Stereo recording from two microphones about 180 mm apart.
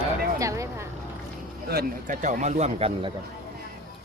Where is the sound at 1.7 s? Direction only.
60° right (ahead or behind).